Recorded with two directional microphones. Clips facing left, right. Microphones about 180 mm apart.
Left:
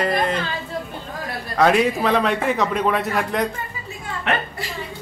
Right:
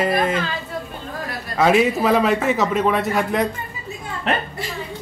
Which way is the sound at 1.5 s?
Centre (ahead or behind).